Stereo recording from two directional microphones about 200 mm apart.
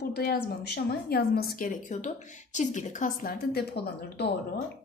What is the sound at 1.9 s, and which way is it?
A woman's voice, 35° left (ahead or behind).